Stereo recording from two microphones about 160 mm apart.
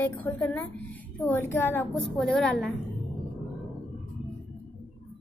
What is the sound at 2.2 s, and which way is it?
Speech, centre (ahead or behind).